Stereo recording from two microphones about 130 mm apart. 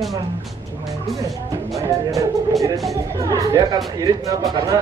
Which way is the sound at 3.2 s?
25° right (ahead or behind).